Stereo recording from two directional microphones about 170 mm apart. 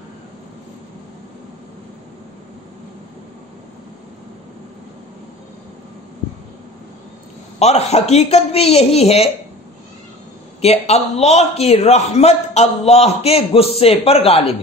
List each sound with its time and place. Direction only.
7.5 s a man's voice: 40° left (ahead or behind)
10.6 s a man's voice: 40° left (ahead or behind)